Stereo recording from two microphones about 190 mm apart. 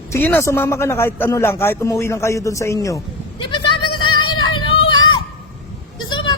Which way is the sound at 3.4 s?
25° left (ahead or behind).